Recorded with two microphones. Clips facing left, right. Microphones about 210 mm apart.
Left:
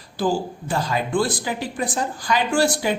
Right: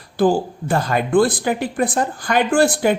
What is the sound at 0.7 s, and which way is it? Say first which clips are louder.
Speech: right 6 dB; 55° right (ahead or behind).